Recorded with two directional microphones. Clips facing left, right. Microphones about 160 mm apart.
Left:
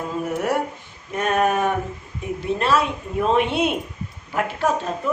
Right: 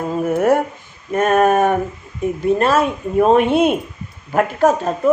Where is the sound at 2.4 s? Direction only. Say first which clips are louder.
Right 5 dB; 45° right (ahead or behind).